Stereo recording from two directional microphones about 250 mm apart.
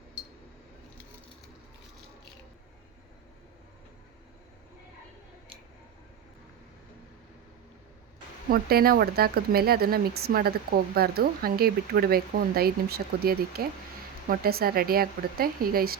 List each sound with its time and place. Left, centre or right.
8.4 s speech: right